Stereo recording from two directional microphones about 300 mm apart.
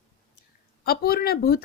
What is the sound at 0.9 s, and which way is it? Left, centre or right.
Speech, left.